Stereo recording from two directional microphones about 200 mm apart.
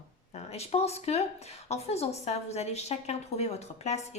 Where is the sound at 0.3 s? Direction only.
30° left (ahead or behind).